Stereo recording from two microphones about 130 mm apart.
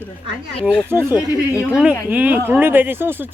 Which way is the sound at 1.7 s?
10° right (ahead or behind).